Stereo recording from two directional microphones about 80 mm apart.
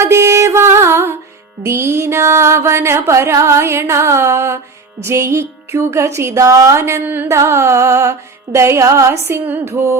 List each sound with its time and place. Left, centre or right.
0.0 s music: right